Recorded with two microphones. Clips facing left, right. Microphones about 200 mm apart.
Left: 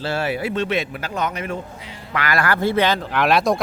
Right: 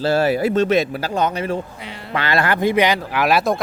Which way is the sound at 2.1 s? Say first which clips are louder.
Right 2 dB; 25° right (ahead or behind).